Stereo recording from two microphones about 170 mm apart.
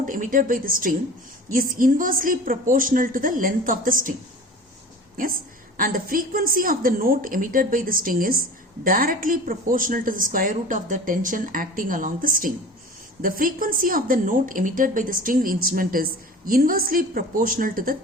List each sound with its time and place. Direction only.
0.0 s a woman's voice: 50° right (ahead or behind)
5.1 s a woman's voice: 55° right (ahead or behind)